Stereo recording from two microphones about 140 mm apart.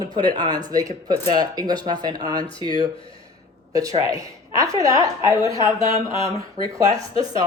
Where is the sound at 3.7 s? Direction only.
25° right (ahead or behind).